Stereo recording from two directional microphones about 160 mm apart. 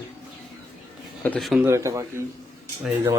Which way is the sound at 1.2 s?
5° left (ahead or behind).